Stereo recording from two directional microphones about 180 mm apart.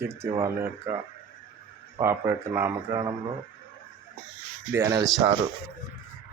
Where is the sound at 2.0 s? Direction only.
15° right (ahead or behind).